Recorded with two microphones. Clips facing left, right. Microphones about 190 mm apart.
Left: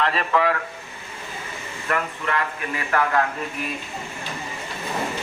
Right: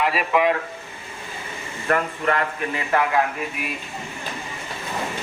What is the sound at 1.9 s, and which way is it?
Speech, 40° right (ahead or behind).